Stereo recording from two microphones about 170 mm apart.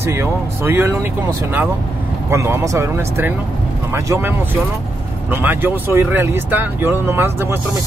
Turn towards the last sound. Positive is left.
turn(degrees=-15)  # may be behind; listen again after turning